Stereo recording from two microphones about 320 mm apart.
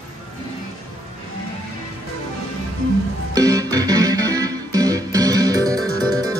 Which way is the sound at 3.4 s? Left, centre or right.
Centre.